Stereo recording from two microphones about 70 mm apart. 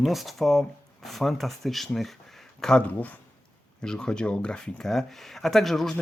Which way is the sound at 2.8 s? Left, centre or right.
Left.